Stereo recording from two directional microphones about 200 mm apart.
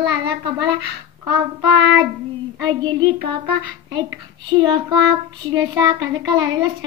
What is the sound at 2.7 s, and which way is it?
A woman's voice, 20° right (ahead or behind).